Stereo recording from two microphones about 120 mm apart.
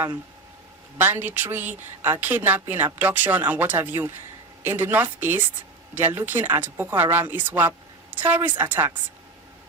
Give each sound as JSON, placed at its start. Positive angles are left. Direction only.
{"t": 0.9, "sound": "a woman's voice", "side_deg": -15}